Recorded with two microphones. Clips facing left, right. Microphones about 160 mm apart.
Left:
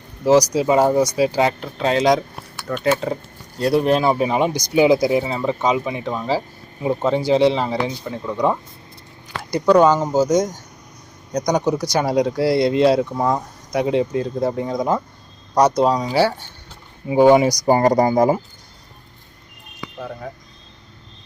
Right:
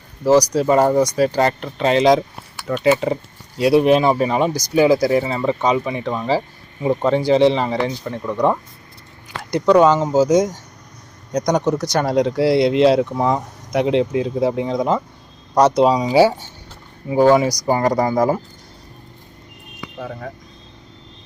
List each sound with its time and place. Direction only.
0.5 s speech: 5° left (ahead or behind)
8.2 s speech: 5° right (ahead or behind)
17.1 s speech: 10° left (ahead or behind)
17.7 s speech: 30° left (ahead or behind)
20.0 s speech: centre (ahead or behind)